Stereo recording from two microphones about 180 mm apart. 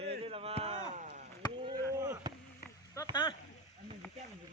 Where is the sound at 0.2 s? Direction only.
35° right (ahead or behind).